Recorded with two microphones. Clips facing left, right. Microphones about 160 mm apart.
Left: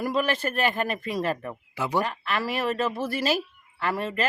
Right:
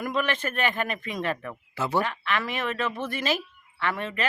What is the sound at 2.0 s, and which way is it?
Speech, 35° left (ahead or behind).